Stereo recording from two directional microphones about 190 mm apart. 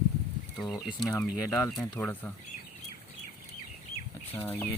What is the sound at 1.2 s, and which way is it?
Speech, 15° left (ahead or behind).